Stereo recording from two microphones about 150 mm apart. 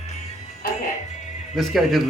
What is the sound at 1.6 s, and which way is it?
Speech, centre (ahead or behind).